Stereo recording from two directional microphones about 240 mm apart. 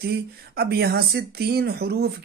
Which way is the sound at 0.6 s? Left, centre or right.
Right.